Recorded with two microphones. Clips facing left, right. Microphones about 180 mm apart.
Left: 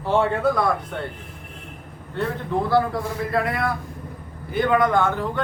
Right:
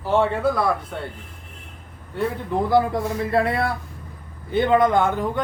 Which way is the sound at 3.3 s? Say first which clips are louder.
Right 2 dB; 30° right (ahead or behind).